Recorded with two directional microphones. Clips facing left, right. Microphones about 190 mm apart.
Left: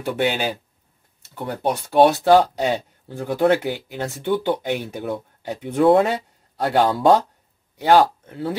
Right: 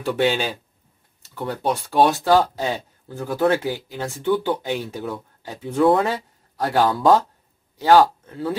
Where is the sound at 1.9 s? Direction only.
20° left (ahead or behind).